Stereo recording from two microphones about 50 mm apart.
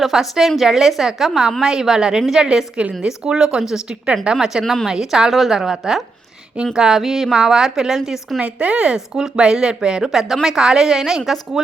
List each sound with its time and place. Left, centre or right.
0.0 s a woman's voice: centre
4.6 s a woman's voice: centre
4.9 s speech: centre
8.4 s speech: right
10.1 s speech: centre